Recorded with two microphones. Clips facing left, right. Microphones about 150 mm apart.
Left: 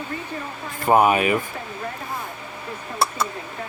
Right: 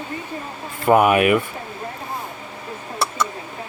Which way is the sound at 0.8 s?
60° right (ahead or behind).